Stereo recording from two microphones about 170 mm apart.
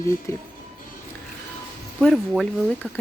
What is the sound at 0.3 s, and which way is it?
Speech, 15° left (ahead or behind).